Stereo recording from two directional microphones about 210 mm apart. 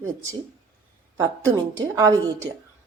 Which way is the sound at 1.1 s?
15° right (ahead or behind).